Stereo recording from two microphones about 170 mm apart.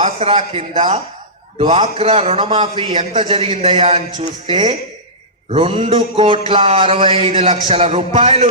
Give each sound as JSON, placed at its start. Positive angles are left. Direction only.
{"t": 0.0, "sound": "speech", "side_deg": -35}
{"t": 2.9, "sound": "a man's voice", "side_deg": -45}
{"t": 3.2, "sound": "speech", "side_deg": -30}